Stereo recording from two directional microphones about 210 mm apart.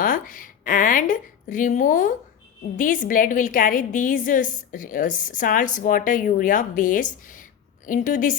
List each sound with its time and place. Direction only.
0.0 s a woman's voice: 40° left (ahead or behind)